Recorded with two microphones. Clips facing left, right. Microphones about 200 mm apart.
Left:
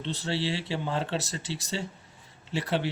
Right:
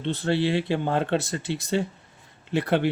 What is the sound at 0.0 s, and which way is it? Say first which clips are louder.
Speech: right 7 dB; 55° right (ahead or behind).